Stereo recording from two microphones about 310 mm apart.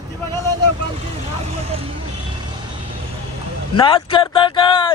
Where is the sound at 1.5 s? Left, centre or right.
Centre.